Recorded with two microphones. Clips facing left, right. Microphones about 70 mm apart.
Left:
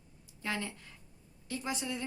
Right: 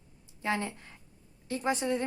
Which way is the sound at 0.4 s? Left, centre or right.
Right.